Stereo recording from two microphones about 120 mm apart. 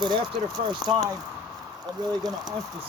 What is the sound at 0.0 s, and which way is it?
Speech, 40° right (ahead or behind).